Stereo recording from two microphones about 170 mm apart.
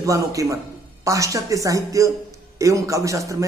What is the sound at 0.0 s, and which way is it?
A man's voice, 20° right (ahead or behind).